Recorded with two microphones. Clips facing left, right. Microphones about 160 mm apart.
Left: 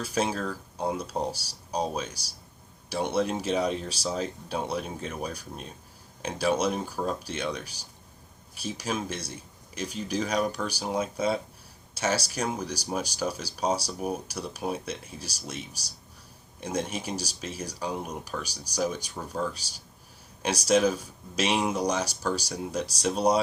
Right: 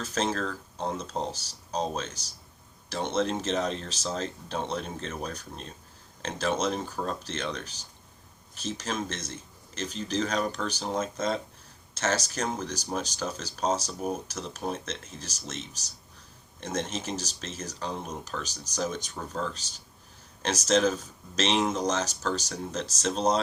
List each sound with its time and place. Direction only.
0.0 s speech: 10° left (ahead or behind)